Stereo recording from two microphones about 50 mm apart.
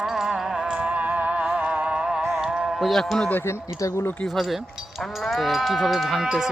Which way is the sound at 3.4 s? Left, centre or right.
Left.